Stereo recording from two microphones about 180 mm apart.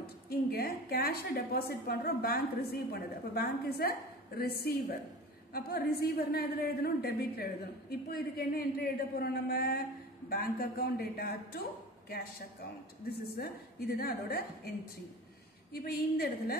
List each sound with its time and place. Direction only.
0.0 s a woman's voice: 60° left (ahead or behind)
13.3 s a woman's voice: 60° left (ahead or behind)
15.7 s a woman's voice: 60° left (ahead or behind)